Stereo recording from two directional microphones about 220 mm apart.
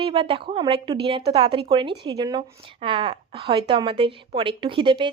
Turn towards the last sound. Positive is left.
turn(degrees=-20)  # may be behind; listen again after turning